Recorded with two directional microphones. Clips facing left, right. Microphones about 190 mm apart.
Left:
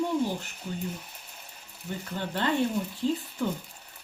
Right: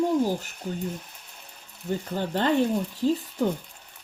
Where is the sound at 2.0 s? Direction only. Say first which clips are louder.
Right 4 dB; 40° right (ahead or behind).